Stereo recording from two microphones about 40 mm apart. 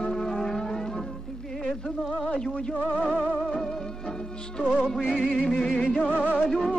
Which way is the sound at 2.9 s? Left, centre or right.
Left.